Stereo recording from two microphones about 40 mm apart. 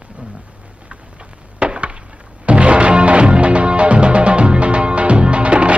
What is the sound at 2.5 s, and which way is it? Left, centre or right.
Music, right.